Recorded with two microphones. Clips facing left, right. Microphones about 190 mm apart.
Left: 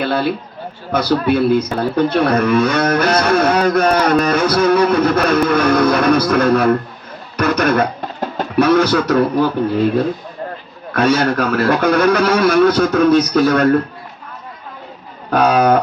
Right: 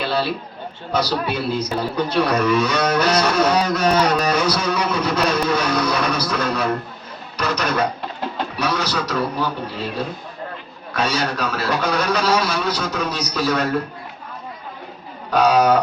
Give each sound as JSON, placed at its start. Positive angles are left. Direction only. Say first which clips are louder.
{"t": 0.0, "sound": "a man's voice", "louder": "left 4 dB", "side_deg": 55}
{"t": 10.9, "sound": "speech", "louder": "left 8 dB", "side_deg": 55}
{"t": 15.3, "sound": "speech", "louder": "left 3 dB", "side_deg": 55}